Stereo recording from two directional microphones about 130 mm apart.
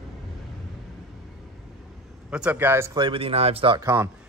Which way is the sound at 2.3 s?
10° right (ahead or behind).